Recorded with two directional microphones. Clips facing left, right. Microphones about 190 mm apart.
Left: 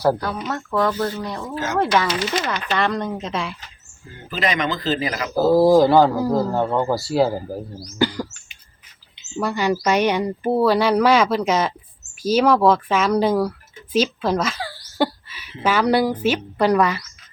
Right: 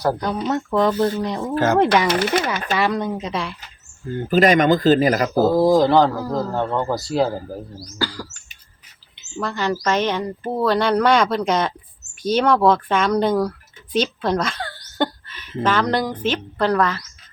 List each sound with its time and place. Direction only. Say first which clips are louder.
0.2 s speech: right 4 dB; 20° right (ahead or behind)
1.5 s speech: right 4 dB; 55° right (ahead or behind)
2.7 s speech: right 1 dB; 5° right (ahead or behind)
4.3 s speech: right 8 dB; 45° right (ahead or behind)
5.5 s speech: left 3 dB; 5° left (ahead or behind)
6.1 s speech: left 4 dB; 15° left (ahead or behind)
7.9 s bird: left 6 dB; 20° left (ahead or behind)
9.3 s speech: left 2 dB; 10° left (ahead or behind)
13.9 s a sound: left 1 dB; 5° left (ahead or behind)
15.6 s speech: left 2 dB; 10° left (ahead or behind)